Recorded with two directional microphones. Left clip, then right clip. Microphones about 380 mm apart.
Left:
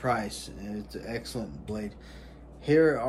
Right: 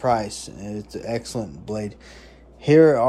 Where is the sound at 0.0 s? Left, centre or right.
Centre.